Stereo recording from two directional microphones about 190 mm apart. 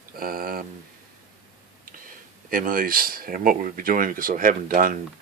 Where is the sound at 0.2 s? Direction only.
50° right (ahead or behind).